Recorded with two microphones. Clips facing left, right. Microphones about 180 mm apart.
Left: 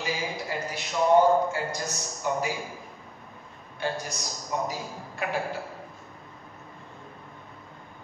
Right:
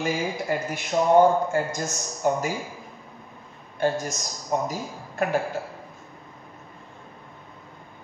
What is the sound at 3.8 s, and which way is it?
A man's voice, 45° right (ahead or behind).